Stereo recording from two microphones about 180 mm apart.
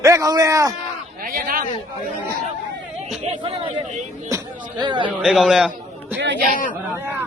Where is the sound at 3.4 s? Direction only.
30° right (ahead or behind).